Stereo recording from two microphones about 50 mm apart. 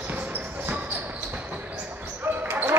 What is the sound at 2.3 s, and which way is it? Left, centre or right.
Basketball bounce, right.